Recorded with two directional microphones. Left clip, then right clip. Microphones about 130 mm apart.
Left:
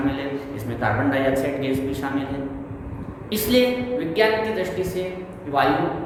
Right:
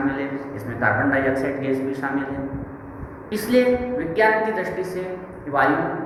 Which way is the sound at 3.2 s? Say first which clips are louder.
Right 1 dB; 25° left (ahead or behind).